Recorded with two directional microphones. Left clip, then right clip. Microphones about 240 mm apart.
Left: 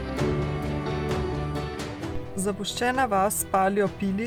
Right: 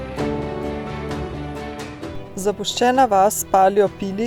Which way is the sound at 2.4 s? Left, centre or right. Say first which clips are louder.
Right 9 dB; centre.